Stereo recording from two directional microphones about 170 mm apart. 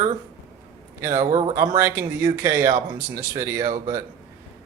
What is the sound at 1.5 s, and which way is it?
Speech, 20° right (ahead or behind).